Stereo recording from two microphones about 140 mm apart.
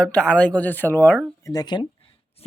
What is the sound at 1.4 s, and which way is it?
Speech, 30° left (ahead or behind).